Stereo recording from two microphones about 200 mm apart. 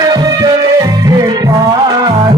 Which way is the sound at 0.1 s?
20° right (ahead or behind).